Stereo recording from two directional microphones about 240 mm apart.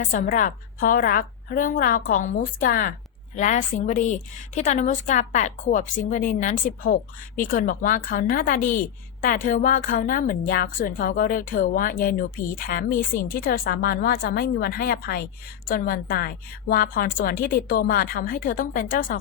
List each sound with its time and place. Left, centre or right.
0.0 s a woman's voice: left